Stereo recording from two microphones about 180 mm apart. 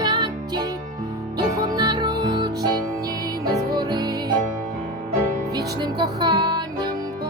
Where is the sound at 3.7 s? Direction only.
25° right (ahead or behind).